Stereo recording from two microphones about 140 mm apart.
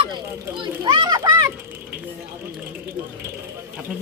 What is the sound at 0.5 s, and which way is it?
Children playing, 35° right (ahead or behind).